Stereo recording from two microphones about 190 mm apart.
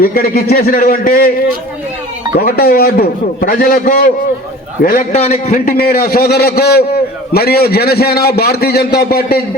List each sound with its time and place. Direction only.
0.0 s a man's voice: 50° left (ahead or behind)
2.3 s a man's voice: 50° left (ahead or behind)
5.1 s a man's voice: 35° left (ahead or behind); by 9.4 s 55° left (ahead or behind)